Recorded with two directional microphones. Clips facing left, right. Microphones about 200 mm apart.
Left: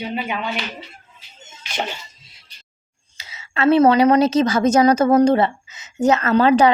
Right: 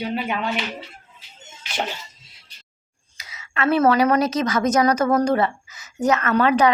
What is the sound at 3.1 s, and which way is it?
A woman's voice, 25° left (ahead or behind).